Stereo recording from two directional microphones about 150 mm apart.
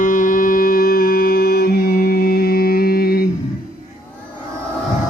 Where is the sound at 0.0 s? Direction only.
65° left (ahead or behind); by 3.2 s 90° left.